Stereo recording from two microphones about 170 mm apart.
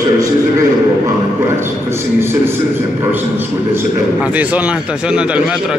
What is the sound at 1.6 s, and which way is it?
A man's voice, 15° right (ahead or behind).